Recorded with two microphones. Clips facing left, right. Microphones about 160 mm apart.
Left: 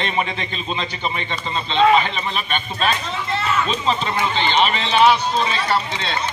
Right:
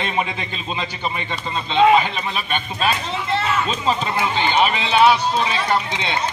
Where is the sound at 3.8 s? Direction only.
10° right (ahead or behind).